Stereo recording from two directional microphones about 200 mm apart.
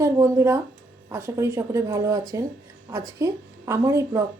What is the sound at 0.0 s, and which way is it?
A woman's voice, 15° right (ahead or behind).